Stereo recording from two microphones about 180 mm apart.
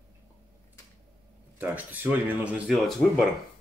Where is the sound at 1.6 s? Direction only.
10° right (ahead or behind).